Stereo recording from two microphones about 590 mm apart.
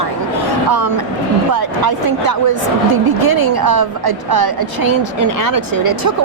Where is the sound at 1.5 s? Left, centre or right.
Right.